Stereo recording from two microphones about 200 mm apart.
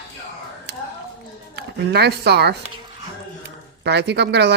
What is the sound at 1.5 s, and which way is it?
Speech, 55° right (ahead or behind).